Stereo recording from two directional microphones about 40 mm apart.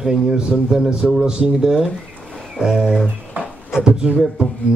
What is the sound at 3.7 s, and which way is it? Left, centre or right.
Speech, centre.